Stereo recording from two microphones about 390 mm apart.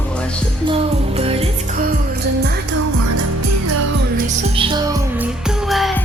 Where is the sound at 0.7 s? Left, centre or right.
Centre.